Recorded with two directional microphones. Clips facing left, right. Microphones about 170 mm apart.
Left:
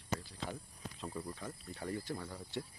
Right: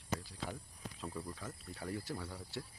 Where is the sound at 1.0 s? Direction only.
5° left (ahead or behind).